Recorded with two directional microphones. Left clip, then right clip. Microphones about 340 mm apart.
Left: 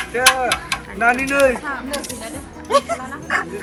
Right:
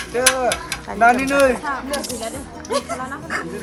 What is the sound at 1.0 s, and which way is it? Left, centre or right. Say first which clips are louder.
Speech: right 2 dB; centre.